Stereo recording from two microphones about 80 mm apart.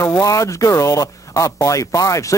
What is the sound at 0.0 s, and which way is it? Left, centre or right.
A man's voice, left.